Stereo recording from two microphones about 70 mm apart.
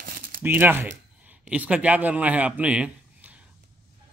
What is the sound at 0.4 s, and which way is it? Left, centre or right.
Speech, right.